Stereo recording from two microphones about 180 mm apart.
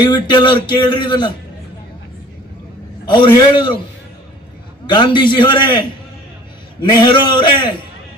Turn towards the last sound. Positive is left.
turn(degrees=25)  # may be behind; listen again after turning